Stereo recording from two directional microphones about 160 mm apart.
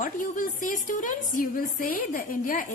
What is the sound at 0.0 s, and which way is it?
A woman's voice, 55° left (ahead or behind).